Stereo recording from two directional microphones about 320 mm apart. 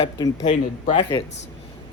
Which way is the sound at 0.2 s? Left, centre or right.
Centre.